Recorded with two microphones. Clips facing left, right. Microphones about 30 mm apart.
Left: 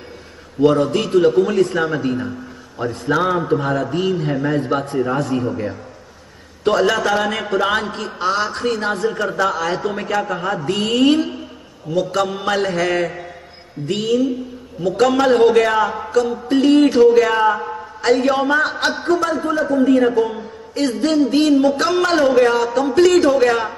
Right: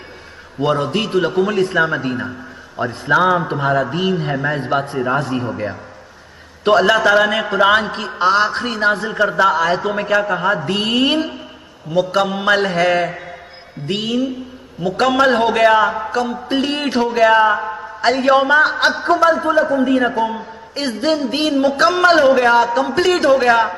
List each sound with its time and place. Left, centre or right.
0.6 s a man's voice: centre